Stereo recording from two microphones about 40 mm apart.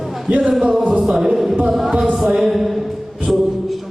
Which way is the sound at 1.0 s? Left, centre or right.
Centre.